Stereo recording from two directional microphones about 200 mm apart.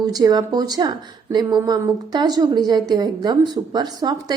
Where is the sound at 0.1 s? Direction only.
20° right (ahead or behind).